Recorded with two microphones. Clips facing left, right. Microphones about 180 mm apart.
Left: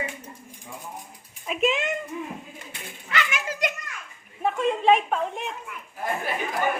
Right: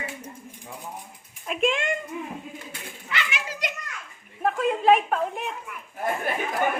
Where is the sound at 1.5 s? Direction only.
5° left (ahead or behind).